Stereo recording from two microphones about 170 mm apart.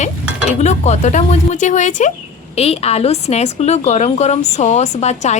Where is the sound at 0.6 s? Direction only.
40° left (ahead or behind).